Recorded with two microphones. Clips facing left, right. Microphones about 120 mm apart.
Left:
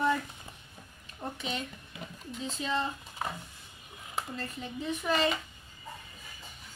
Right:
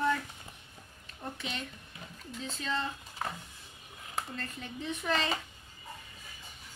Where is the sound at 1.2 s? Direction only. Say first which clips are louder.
Left 3 dB; 15° left (ahead or behind).